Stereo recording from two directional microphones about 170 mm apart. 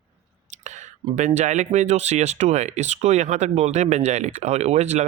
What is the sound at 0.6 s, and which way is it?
Whispering, 45° right (ahead or behind).